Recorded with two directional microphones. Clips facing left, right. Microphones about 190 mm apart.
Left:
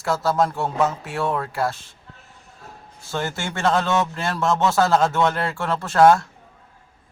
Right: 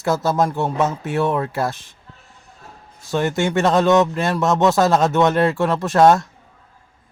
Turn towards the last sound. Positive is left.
turn(degrees=-20)  # may be behind; listen again after turning